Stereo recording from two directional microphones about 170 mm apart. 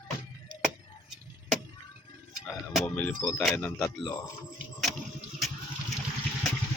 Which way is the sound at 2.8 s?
10° left (ahead or behind).